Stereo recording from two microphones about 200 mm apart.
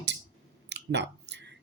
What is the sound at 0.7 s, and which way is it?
Clicking, 60° right (ahead or behind).